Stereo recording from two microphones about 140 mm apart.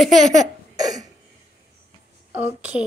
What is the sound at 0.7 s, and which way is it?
Cough, 25° right (ahead or behind).